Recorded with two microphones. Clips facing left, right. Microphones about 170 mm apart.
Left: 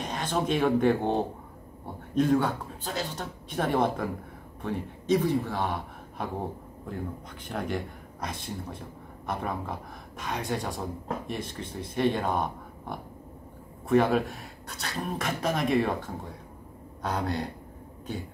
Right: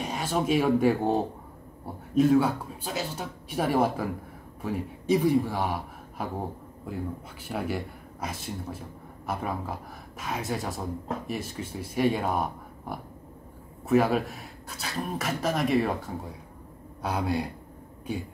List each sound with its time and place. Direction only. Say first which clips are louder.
0.0 s a man's voice: right 1 dB; 10° right (ahead or behind)
7.4 s a man's voice: right 1 dB; 5° right (ahead or behind)
17.0 s speech: right 2 dB; 10° right (ahead or behind)